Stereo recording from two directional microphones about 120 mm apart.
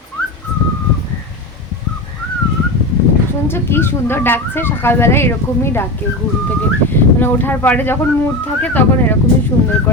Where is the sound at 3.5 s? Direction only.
20° left (ahead or behind).